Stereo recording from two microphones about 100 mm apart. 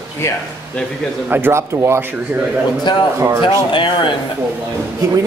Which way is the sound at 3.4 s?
55° left (ahead or behind).